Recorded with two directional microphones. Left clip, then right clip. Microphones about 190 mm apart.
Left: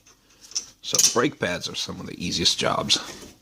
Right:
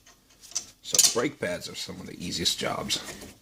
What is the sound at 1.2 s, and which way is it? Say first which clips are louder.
A man's voice: left 5 dB; 35° left (ahead or behind).